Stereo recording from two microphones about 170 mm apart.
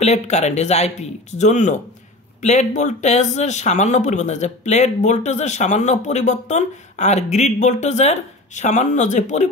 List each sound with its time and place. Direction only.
0.0 s speech: 40° left (ahead or behind)